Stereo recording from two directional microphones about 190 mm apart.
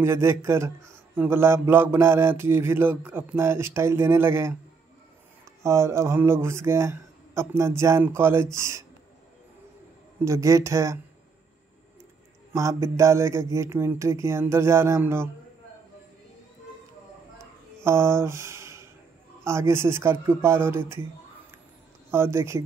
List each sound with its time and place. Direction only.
0.0 s mantra: 15° right (ahead or behind)
5.6 s mantra: 15° right (ahead or behind)
10.2 s mantra: 15° right (ahead or behind)
12.5 s mantra: 15° right (ahead or behind)
17.8 s speech: 15° right (ahead or behind)
19.4 s mantra: 15° right (ahead or behind)
22.1 s mantra: 15° right (ahead or behind)